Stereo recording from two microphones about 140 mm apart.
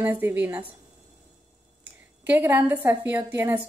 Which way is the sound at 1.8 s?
15° right (ahead or behind).